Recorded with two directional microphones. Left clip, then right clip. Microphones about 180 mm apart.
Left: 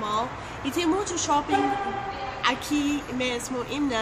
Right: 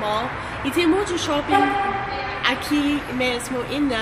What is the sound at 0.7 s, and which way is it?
Speech, 15° left (ahead or behind).